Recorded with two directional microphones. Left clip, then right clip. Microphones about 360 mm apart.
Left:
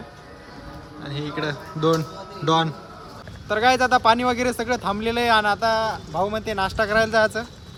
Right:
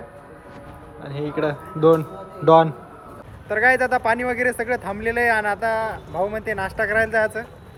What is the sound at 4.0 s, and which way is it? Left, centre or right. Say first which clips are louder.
Speech: left 2 dB; centre.